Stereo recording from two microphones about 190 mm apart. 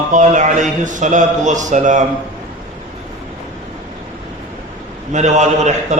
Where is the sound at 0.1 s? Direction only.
40° right (ahead or behind).